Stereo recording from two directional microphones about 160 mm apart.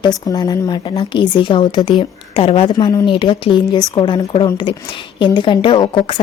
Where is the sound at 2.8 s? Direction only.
25° left (ahead or behind).